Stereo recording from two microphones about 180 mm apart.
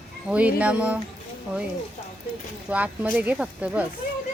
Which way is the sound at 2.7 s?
10° right (ahead or behind).